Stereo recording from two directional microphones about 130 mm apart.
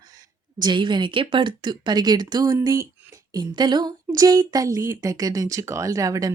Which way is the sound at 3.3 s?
35° right (ahead or behind).